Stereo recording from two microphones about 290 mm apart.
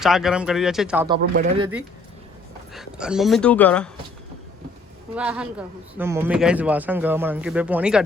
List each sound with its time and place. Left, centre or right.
0.0 s speech: centre
1.0 s speech: centre
2.7 s speech: centre
5.1 s speech: centre